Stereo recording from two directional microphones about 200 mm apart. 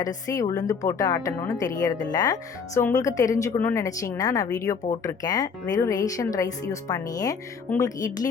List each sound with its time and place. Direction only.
0.0 s speech: 15° left (ahead or behind)